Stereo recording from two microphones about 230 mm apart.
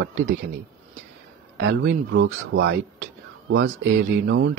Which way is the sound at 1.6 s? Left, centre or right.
Right.